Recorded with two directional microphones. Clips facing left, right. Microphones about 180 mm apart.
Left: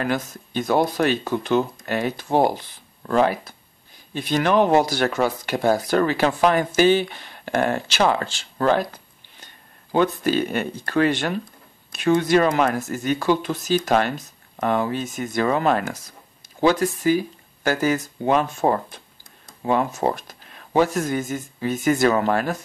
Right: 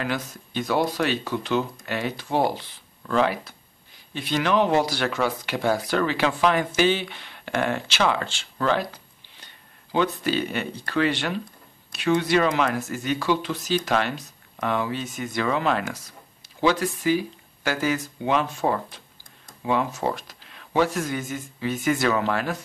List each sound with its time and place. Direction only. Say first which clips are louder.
0.0 s speech: left 4 dB; 45° left (ahead or behind)